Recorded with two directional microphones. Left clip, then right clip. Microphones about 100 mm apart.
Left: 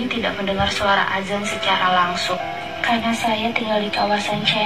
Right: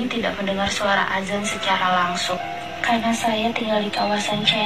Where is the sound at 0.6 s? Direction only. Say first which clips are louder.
Left 3 dB; 35° right (ahead or behind).